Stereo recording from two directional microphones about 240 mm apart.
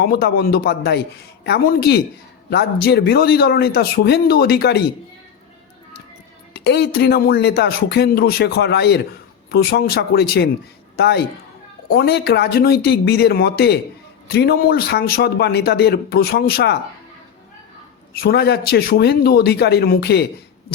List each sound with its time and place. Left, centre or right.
0.0 s speech: left
6.5 s speech: left
18.1 s speech: left